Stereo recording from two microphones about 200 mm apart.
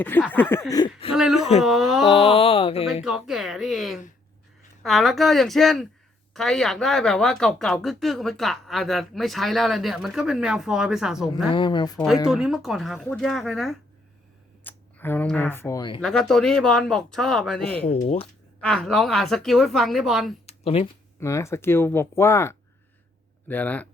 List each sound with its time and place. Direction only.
0.0 s speech: 10° left (ahead or behind)
1.1 s speech: 5° right (ahead or behind)
2.0 s speech: 30° left (ahead or behind)
3.0 s speech: centre (ahead or behind)
11.5 s speech: 25° left (ahead or behind)
12.3 s speech: 5° right (ahead or behind); by 16.0 s 20° left (ahead or behind)
16.0 s speech: centre (ahead or behind)
17.8 s speech: 30° left (ahead or behind)
18.6 s speech: centre (ahead or behind)
20.5 s a sound: 30° left (ahead or behind)
21.2 s speech: 15° left (ahead or behind)